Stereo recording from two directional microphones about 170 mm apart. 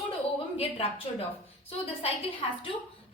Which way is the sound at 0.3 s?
35° left (ahead or behind).